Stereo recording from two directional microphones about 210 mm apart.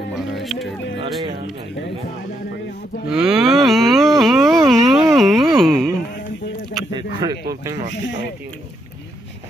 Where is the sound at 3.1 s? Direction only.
Centre (ahead or behind).